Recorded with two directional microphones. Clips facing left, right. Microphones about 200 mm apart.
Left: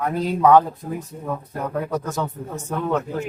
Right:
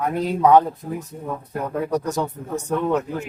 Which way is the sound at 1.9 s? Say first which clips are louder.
Right 3 dB; 15° right (ahead or behind).